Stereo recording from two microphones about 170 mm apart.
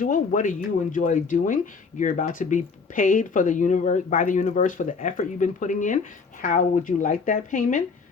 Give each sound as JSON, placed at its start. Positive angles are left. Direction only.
{"t": 0.0, "sound": "speech", "side_deg": 50}